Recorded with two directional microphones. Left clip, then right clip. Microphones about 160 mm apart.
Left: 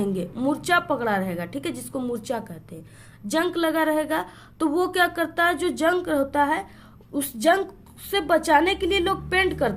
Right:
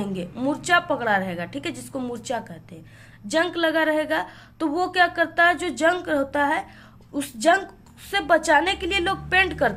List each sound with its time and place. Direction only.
0.0 s a woman's voice: 30° left (ahead or behind)